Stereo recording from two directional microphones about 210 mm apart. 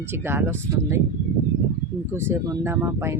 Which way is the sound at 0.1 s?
10° right (ahead or behind).